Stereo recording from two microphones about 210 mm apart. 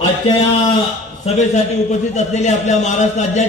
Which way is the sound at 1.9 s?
35° left (ahead or behind).